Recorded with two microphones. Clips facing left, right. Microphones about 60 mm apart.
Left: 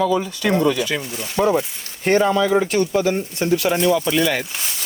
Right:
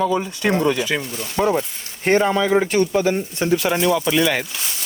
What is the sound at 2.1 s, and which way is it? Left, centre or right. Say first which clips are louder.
Speech: even; right.